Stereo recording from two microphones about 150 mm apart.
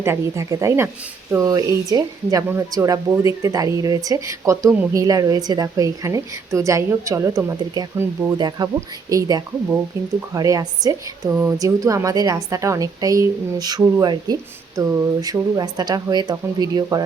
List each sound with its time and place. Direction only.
0.0 s speech: 20° right (ahead or behind)